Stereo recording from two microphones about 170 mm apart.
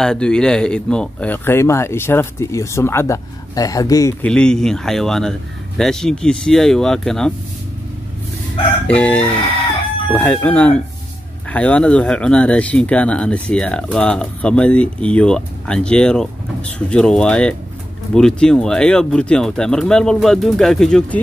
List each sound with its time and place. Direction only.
0.0 s speech: 5° left (ahead or behind); by 4.1 s 20° left (ahead or behind)
4.2 s speech: 5° left (ahead or behind)
8.8 s speech: 10° left (ahead or behind)